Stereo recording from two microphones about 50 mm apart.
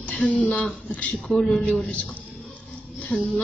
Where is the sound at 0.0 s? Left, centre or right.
Left.